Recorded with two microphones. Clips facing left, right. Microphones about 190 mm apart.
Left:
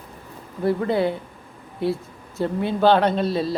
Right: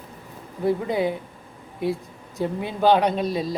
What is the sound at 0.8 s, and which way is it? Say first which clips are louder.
Speech: left 2 dB; 15° right (ahead or behind).